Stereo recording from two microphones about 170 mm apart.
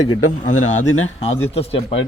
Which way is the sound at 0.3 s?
45° left (ahead or behind).